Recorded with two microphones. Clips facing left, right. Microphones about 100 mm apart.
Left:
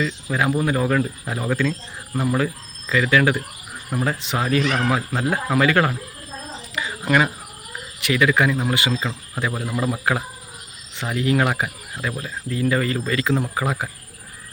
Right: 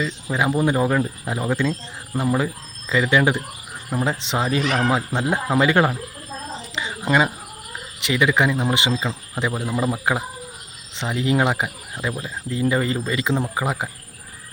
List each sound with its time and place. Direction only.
0.0 s speech: 20° right (ahead or behind)
6.7 s a sound: 25° right (ahead or behind)
8.0 s speech: 20° right (ahead or behind)
9.0 s speech: 10° right (ahead or behind)
9.4 s speech: 20° right (ahead or behind)